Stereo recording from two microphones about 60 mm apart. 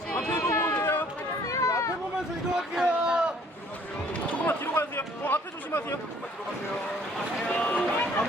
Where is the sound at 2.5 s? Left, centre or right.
Centre.